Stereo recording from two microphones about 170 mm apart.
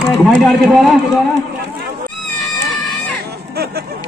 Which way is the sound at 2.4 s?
Centre (ahead or behind).